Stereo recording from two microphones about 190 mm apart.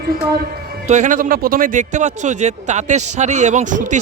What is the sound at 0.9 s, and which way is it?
Speech, 40° right (ahead or behind).